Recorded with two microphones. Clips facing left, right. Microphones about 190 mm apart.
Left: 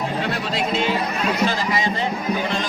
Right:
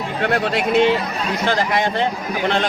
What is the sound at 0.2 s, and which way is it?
A man's voice, 60° right (ahead or behind).